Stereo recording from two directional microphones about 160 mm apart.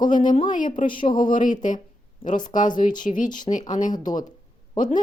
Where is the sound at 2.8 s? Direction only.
55° left (ahead or behind).